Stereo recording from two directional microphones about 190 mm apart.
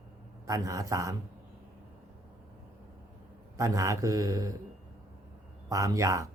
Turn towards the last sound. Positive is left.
turn(degrees=-15)  # may be behind; listen again after turning